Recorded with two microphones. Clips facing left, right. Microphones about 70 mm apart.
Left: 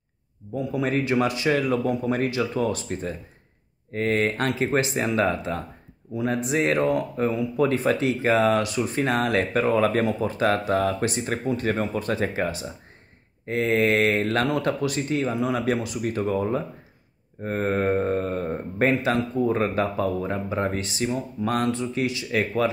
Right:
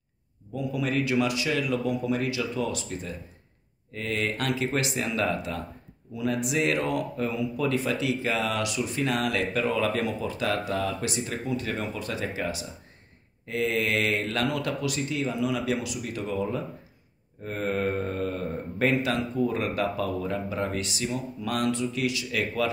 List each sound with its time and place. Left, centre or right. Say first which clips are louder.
0.6 s speech: left 3 dB; left